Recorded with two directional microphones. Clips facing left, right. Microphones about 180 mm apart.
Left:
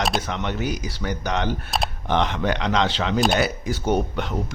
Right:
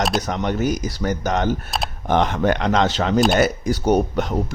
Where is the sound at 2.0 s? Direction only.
45° right (ahead or behind).